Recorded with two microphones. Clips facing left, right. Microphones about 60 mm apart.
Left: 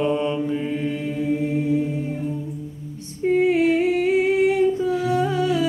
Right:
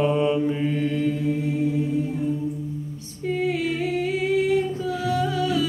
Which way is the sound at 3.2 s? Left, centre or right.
Left.